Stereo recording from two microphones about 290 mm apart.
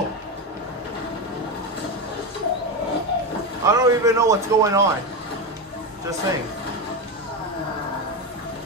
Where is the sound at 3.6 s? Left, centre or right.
Centre.